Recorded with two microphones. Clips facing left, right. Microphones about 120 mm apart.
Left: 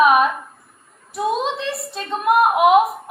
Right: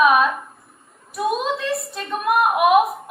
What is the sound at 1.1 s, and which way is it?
A woman's voice, 25° left (ahead or behind).